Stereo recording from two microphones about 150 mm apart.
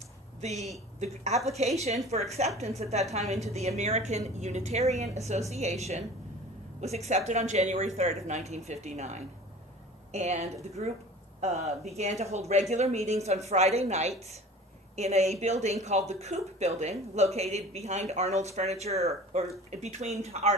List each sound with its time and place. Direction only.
0.4 s speech: 45° right (ahead or behind)
6.8 s speech: 45° right (ahead or behind)